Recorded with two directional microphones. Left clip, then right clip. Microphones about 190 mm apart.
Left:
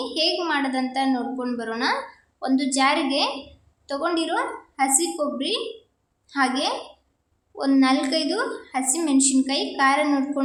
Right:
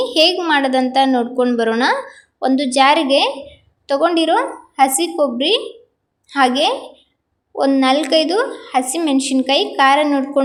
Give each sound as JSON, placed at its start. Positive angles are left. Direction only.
{"t": 0.0, "sound": "a woman's voice", "side_deg": -35}